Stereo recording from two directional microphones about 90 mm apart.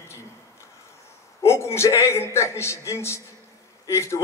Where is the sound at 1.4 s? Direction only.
30° left (ahead or behind).